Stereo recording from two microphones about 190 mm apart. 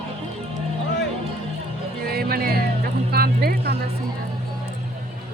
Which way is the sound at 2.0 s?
55° right (ahead or behind).